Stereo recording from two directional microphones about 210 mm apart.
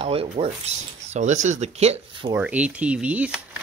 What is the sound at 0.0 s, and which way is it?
Speech, 25° right (ahead or behind).